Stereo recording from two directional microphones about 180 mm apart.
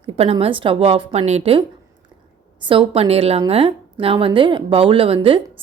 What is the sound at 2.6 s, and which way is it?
A woman's voice, 30° right (ahead or behind).